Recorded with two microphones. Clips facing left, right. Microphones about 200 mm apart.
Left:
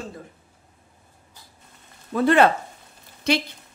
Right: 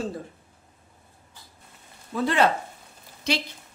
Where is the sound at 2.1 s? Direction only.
55° left (ahead or behind).